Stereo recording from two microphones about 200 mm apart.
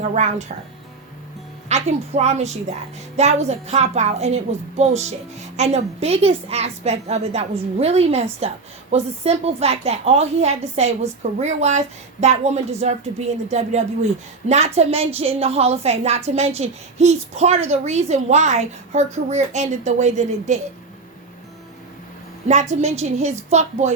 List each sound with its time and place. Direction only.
0.1 s a woman's voice: 35° right (ahead or behind)
1.7 s a woman's voice: 35° right (ahead or behind)
12.8 s a woman's voice: 35° right (ahead or behind)
22.7 s a woman's voice: 35° right (ahead or behind)